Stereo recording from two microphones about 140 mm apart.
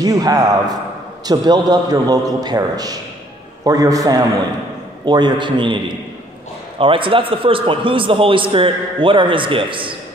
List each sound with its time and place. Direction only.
0.0 s a man's voice: 25° right (ahead or behind)